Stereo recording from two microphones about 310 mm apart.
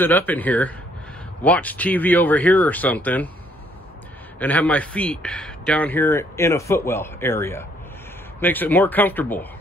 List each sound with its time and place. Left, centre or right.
0.0 s speech: centre
4.4 s speech: centre